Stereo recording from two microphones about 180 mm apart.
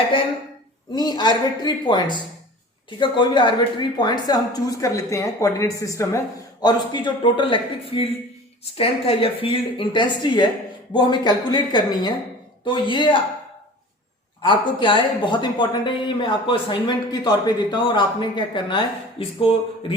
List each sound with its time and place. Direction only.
0.9 s speech: 25° left (ahead or behind)
14.4 s speech: 25° left (ahead or behind)